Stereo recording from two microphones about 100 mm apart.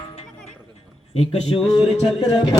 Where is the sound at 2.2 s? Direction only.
45° left (ahead or behind).